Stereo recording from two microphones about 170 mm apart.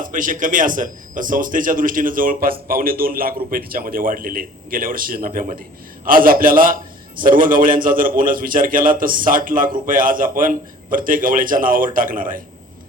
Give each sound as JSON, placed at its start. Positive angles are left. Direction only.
{"t": 0.0, "sound": "a man's voice", "side_deg": -50}